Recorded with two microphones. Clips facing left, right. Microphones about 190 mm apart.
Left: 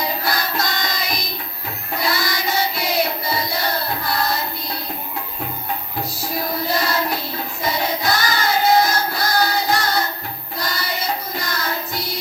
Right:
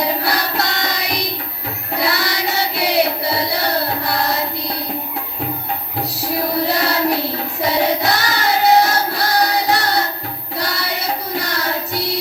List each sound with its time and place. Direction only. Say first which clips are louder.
0.0 s music: right 4 dB; 70° right (ahead or behind)
6.0 s music: right 6 dB; 70° right (ahead or behind)